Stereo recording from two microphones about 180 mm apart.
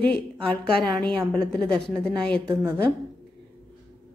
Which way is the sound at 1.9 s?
5° left (ahead or behind).